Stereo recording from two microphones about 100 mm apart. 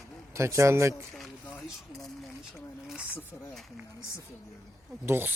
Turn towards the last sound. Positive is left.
turn(degrees=-25)  # may be behind; listen again after turning